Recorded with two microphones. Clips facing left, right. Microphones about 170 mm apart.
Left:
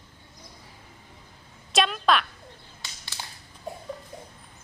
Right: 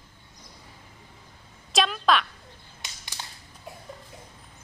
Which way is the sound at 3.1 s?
15° right (ahead or behind).